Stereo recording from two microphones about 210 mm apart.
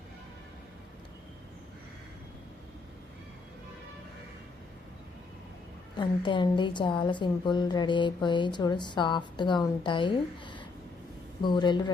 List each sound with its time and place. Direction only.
6.0 s a woman's voice: 25° left (ahead or behind)